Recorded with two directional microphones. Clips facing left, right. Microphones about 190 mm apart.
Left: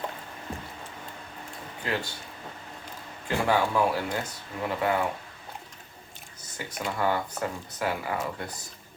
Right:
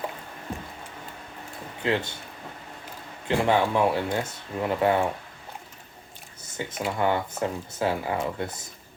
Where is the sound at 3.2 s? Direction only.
20° right (ahead or behind).